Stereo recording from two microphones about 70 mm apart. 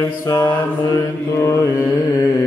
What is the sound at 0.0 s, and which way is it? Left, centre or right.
Mantra, left.